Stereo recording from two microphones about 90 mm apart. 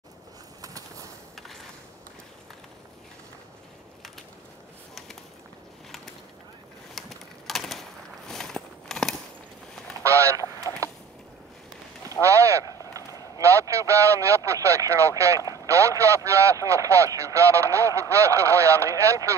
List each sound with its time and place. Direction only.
0.6 s bird: 40° right (ahead or behind)
7.0 s typewriter: centre (ahead or behind)
8.3 s a sound: 5° left (ahead or behind)
10.0 s goose: 30° right (ahead or behind)
12.2 s a sound: 35° right (ahead or behind)
13.4 s speech: 35° right (ahead or behind)